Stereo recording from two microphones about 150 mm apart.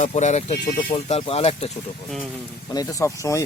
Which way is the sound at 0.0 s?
50° left (ahead or behind).